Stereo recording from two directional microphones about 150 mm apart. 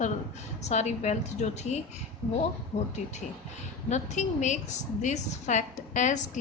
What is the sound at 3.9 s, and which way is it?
Speech, 50° left (ahead or behind).